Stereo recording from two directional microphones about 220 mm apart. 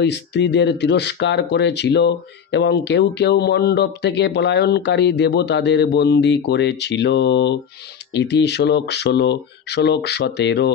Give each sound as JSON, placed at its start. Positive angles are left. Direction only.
{"t": 0.0, "sound": "speech", "side_deg": 50}